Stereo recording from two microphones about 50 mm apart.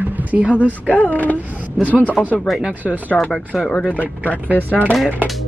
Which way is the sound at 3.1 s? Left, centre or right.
Centre.